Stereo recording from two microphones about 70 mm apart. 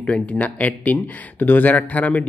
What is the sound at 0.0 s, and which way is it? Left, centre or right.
Speech, centre.